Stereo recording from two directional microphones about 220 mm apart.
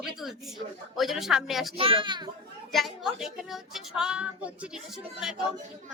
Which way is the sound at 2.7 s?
Centre (ahead or behind).